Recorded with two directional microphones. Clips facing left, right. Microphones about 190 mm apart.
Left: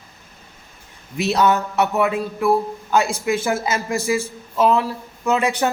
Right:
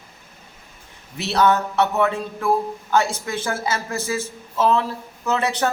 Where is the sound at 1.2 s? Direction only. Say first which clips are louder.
Left 1 dB; 15° left (ahead or behind).